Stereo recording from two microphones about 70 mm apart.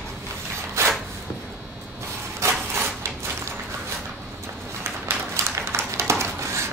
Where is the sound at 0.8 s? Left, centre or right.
Right.